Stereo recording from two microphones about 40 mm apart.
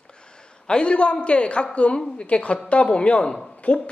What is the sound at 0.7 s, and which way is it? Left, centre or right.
Speech, left.